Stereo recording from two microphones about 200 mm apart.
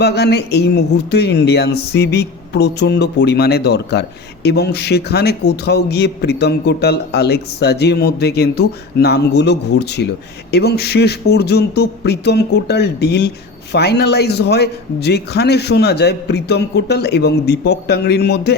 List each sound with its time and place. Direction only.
0.0 s speech: 55° left (ahead or behind)